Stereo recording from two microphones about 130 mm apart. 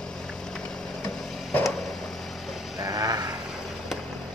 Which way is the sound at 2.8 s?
30° right (ahead or behind).